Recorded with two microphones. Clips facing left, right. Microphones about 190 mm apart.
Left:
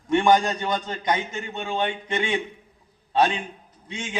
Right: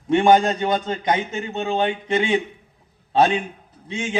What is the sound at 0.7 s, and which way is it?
A man's voice, 30° right (ahead or behind).